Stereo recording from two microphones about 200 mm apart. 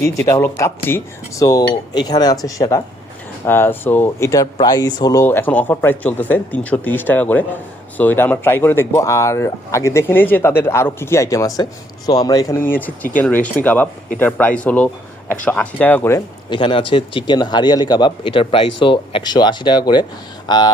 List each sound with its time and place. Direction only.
0.3 s speech: 15° left (ahead or behind)
16.5 s a man's voice: 25° left (ahead or behind)